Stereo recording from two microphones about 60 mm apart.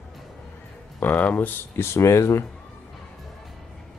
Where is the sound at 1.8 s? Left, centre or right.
Left.